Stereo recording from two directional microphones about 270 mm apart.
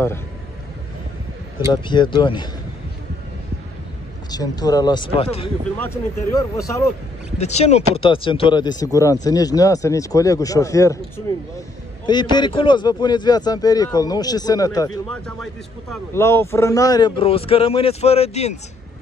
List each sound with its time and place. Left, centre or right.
1.7 s a man's voice: centre
4.3 s a man's voice: centre
5.8 s a man's voice: centre
7.3 s a man's voice: left
12.1 s a man's voice: centre
15.0 s a man's voice: centre; by 18.5 s left